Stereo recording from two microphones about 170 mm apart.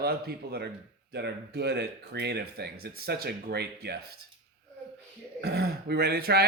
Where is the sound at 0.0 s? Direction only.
65° right (ahead or behind).